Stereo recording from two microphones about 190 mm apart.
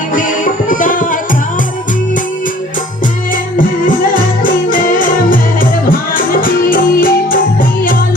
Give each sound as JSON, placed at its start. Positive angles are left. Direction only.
{"t": 0.1, "sound": "music", "side_deg": 45}
{"t": 3.6, "sound": "music", "side_deg": 45}